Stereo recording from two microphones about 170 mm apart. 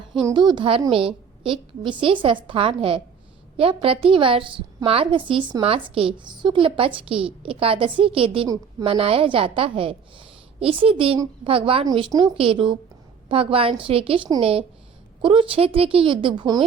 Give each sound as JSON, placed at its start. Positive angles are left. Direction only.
{"t": 0.3, "sound": "a woman's voice", "side_deg": -25}